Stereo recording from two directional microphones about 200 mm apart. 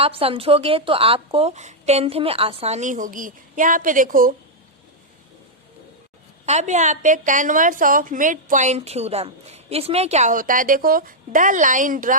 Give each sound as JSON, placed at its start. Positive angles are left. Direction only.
{"t": 0.0, "sound": "a woman's voice", "side_deg": -30}
{"t": 6.4, "sound": "a woman's voice", "side_deg": -35}